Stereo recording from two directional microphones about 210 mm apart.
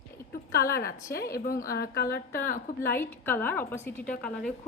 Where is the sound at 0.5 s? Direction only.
45° left (ahead or behind).